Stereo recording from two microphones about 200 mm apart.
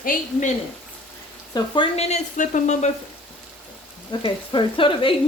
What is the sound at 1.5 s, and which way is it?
Speech, 25° left (ahead or behind).